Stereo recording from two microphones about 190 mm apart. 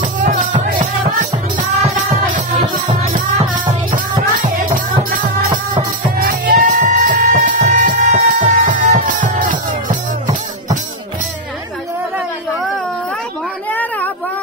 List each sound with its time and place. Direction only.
0.0 s music: 45° right (ahead or behind)
1.8 s music: 35° right (ahead or behind)
6.1 s music: 50° right (ahead or behind)
13.7 s a sound: 10° left (ahead or behind)